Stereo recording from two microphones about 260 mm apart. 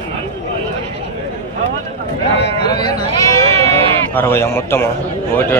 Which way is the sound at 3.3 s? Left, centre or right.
Centre.